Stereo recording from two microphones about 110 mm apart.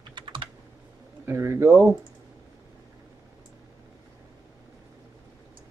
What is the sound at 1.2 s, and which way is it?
Speech, 25° right (ahead or behind).